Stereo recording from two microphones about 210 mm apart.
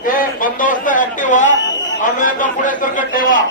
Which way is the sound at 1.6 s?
60° left (ahead or behind).